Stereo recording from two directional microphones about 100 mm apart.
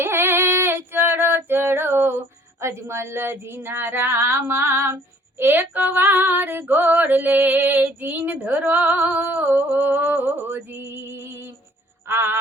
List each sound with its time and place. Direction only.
0.0 s female singing: 25° right (ahead or behind)